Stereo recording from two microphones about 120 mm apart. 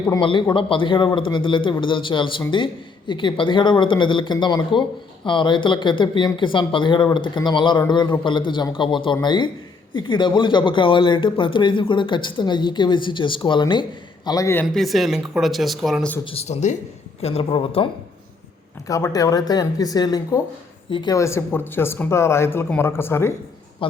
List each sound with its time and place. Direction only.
0.2 s speech: 45° left (ahead or behind)
14.3 s speech: 30° left (ahead or behind)
14.7 s speech: centre (ahead or behind)
16.2 s speech: 55° left (ahead or behind)
17.2 s speech: 55° left (ahead or behind)
18.9 s speech: 25° left (ahead or behind)
21.2 s speech: 20° left (ahead or behind)
23.8 s a man's voice: 45° left (ahead or behind)